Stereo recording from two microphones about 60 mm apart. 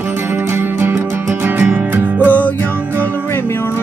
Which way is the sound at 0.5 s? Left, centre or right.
Right.